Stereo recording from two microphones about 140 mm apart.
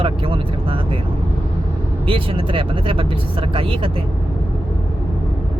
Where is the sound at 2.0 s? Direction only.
40° right (ahead or behind).